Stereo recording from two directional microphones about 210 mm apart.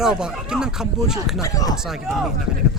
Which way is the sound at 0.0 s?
5° right (ahead or behind).